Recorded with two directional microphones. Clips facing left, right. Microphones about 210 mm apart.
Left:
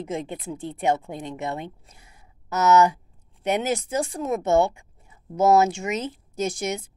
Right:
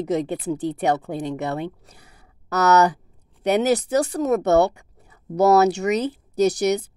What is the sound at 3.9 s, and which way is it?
Speech, 70° right (ahead or behind).